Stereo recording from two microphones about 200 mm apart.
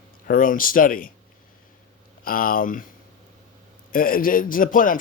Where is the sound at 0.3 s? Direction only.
45° left (ahead or behind).